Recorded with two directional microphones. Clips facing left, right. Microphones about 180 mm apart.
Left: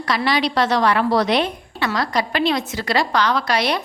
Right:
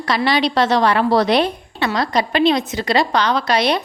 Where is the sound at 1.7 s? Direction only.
25° right (ahead or behind).